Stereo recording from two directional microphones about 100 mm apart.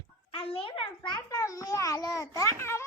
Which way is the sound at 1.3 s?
35° left (ahead or behind).